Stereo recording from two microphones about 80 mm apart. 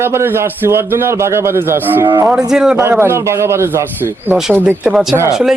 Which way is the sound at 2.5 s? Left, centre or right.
Centre.